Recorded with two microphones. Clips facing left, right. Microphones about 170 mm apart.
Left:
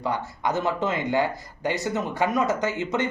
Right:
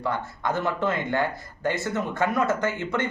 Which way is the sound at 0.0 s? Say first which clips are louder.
Left 1 dB; 15° left (ahead or behind).